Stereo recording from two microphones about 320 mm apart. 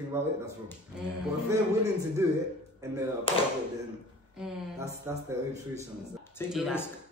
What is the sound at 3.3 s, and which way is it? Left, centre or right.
Speech, centre.